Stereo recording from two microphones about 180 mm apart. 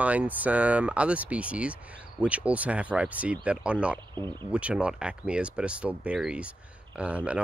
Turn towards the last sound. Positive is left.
turn(degrees=-5)  # may be behind; listen again after turning